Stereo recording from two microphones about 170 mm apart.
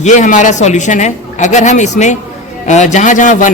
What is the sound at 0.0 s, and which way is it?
A man's voice, 45° left (ahead or behind).